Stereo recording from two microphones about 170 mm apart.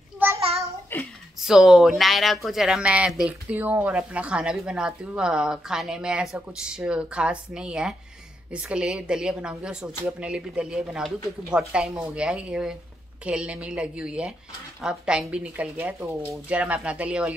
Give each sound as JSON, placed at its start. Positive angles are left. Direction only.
{"t": 0.4, "sound": "child singing", "side_deg": -35}
{"t": 0.9, "sound": "a sound", "side_deg": 10}
{"t": 1.4, "sound": "speech", "side_deg": -5}